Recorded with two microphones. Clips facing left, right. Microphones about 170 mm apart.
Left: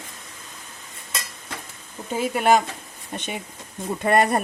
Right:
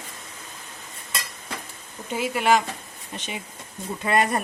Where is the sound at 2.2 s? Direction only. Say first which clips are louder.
Left 2 dB; 45° left (ahead or behind).